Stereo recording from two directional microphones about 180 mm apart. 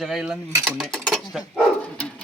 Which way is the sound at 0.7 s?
Centre (ahead or behind).